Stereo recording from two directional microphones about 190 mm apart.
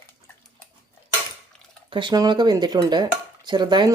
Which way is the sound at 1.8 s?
25° right (ahead or behind).